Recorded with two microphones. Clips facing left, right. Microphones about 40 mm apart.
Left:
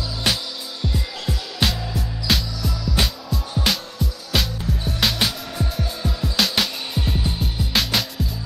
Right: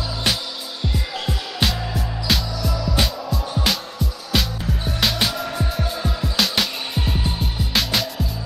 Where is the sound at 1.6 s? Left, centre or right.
Centre.